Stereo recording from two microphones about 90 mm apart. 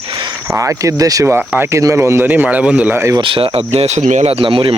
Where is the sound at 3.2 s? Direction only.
80° right.